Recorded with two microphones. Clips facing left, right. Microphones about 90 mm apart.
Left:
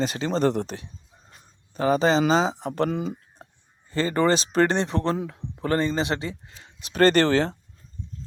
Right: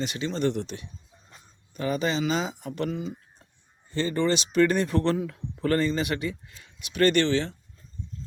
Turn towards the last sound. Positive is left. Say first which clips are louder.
# left 4 dB
turn(degrees=45)  # may be behind; listen again after turning